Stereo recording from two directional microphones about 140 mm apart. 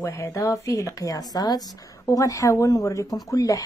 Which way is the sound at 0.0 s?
20° left (ahead or behind).